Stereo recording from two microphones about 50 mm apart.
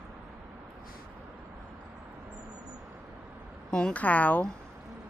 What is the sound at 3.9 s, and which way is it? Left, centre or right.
Speech, left.